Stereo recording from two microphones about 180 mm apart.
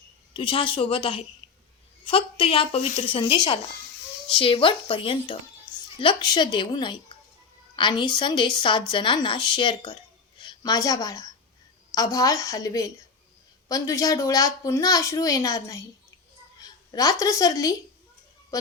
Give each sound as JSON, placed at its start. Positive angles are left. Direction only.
{"t": 0.3, "sound": "a woman's voice", "side_deg": 30}
{"t": 16.9, "sound": "a woman's voice", "side_deg": 20}